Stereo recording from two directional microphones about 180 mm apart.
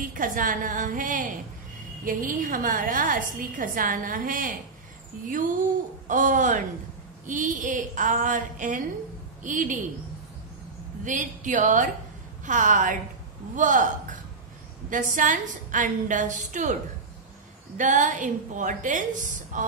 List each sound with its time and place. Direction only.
0.0 s a woman's voice: 50° right (ahead or behind)
6.0 s a woman's voice: 45° right (ahead or behind)
11.1 s a woman's voice: 45° right (ahead or behind)
14.9 s a woman's voice: 45° right (ahead or behind)
17.7 s a woman's voice: 45° right (ahead or behind)